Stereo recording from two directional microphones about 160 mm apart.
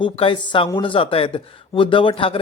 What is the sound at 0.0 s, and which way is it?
A man's voice, 30° left (ahead or behind).